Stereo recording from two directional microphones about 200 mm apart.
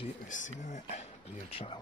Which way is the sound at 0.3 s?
40° left (ahead or behind).